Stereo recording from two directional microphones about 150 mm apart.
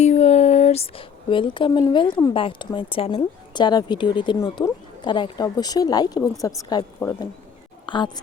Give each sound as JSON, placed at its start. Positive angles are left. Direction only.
{"t": 0.0, "sound": "a woman's voice", "side_deg": 45}